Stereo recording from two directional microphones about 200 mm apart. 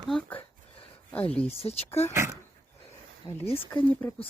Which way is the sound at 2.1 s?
15° right (ahead or behind).